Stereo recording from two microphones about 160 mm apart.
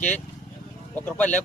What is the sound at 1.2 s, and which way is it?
Speech, 10° left (ahead or behind).